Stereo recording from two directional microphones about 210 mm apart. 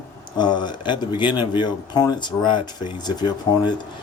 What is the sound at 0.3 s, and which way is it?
Speech, 20° left (ahead or behind).